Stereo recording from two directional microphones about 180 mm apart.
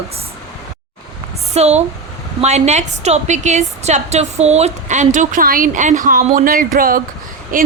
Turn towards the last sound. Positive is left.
turn(degrees=-50)  # may be behind; listen again after turning